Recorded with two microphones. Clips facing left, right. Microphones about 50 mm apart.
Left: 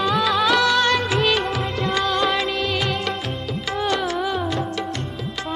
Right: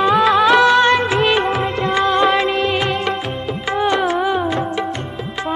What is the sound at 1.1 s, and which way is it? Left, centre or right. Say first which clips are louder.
Music of bollywood: right 4 dB; centre.